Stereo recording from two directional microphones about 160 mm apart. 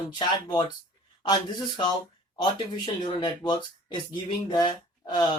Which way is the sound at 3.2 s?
30° left (ahead or behind).